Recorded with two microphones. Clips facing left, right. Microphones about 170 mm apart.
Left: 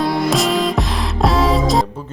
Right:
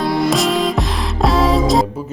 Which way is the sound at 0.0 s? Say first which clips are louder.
Right 1 dB; centre (ahead or behind).